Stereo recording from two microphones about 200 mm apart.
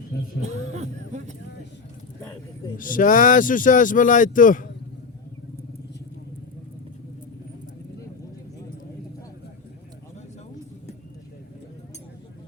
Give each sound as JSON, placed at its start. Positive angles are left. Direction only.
{"t": 0.4, "sound": "speech", "side_deg": -35}
{"t": 2.7, "sound": "speech", "side_deg": 40}